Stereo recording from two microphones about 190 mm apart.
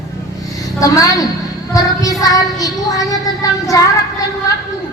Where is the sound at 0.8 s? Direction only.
20° left (ahead or behind).